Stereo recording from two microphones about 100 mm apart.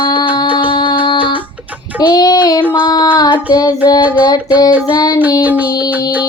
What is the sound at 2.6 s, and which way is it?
Music, 15° right (ahead or behind).